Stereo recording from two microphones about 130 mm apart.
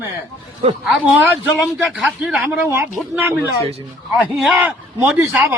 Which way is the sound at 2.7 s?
20° right (ahead or behind).